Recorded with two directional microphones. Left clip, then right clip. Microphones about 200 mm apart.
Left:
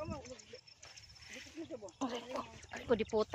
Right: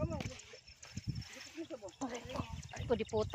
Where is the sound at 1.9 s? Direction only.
25° left (ahead or behind).